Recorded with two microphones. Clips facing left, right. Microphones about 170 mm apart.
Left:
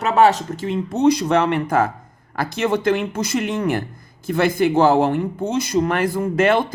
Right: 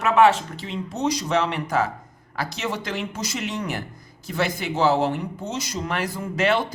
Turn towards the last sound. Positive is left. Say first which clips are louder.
# left 5 dB
turn(degrees=50)  # may be behind; listen again after turning